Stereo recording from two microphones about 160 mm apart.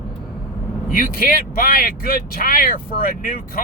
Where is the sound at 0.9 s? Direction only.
60° left (ahead or behind).